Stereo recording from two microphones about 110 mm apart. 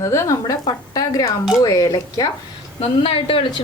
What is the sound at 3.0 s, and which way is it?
Speech, 55° left (ahead or behind).